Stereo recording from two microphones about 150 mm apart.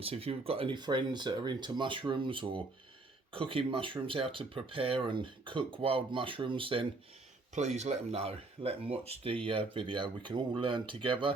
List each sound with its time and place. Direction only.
0.0 s speech: 40° right (ahead or behind)
7.5 s speech: 50° right (ahead or behind)